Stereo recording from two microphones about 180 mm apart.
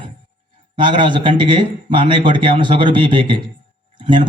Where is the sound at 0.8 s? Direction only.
25° right (ahead or behind).